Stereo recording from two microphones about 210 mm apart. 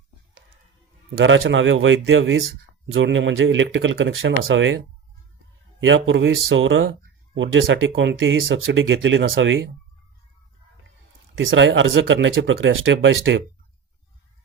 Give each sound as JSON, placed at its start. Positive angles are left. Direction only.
{"t": 1.2, "sound": "speech", "side_deg": -65}
{"t": 5.8, "sound": "speech", "side_deg": -65}
{"t": 11.3, "sound": "speech", "side_deg": -65}